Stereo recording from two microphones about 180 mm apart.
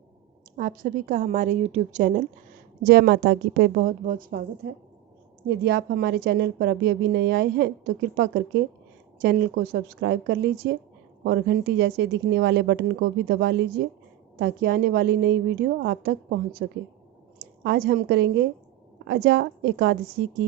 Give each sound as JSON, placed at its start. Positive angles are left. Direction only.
{"t": 0.5, "sound": "a woman's voice", "side_deg": -50}
{"t": 2.8, "sound": "a woman's voice", "side_deg": -60}
{"t": 5.5, "sound": "a woman's voice", "side_deg": -70}